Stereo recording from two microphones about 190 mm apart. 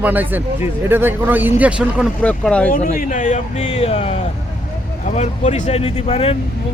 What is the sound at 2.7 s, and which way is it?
Speech, 40° left (ahead or behind).